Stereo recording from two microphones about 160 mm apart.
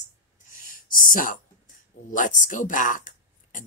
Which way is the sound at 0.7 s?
60° left (ahead or behind).